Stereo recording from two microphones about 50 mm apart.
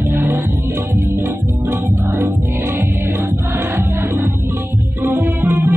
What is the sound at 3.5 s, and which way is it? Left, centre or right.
Music, right.